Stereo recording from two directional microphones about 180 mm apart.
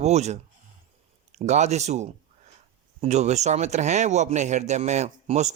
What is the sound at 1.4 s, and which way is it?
Speech, 40° right (ahead or behind).